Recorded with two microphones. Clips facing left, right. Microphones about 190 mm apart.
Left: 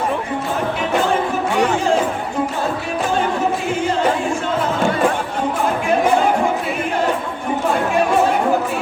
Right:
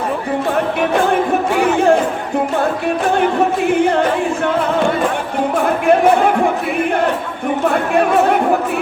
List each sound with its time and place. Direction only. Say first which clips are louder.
1.6 s music: right 6 dB; 60° right (ahead or behind)
3.7 s music: right 6 dB; 60° right (ahead or behind)
5.6 s music: right 5 dB; 60° right (ahead or behind)
7.9 s chatter: right 3 dB; 60° right (ahead or behind)